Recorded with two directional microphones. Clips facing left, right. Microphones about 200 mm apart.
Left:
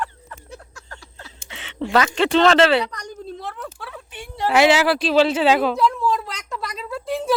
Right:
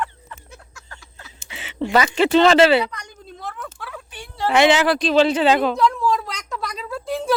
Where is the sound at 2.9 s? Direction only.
40° left (ahead or behind); by 4.5 s 20° left (ahead or behind).